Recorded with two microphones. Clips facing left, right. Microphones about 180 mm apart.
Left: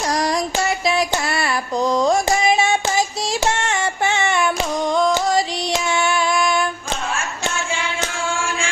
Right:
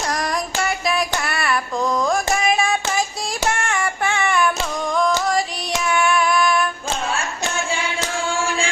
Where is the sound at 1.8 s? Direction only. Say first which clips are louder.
Left 4 dB; 20° left (ahead or behind).